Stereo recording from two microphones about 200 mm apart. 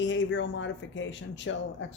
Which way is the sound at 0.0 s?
65° left (ahead or behind).